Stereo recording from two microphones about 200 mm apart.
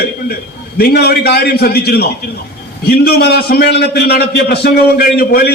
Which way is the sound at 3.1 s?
50° left (ahead or behind).